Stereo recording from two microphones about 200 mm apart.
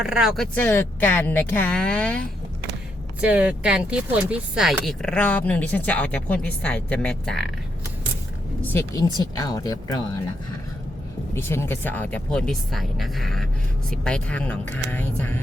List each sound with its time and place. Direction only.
0.0 s speech: 5° right (ahead or behind)
0.5 s a woman's voice: 10° left (ahead or behind)
3.2 s speech: 5° right (ahead or behind)
8.6 s a woman's voice: 10° left (ahead or behind)
11.3 s a woman's voice: 10° left (ahead or behind)